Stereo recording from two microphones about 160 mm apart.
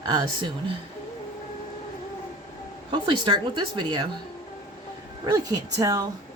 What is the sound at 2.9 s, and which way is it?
A woman's voice, 30° right (ahead or behind).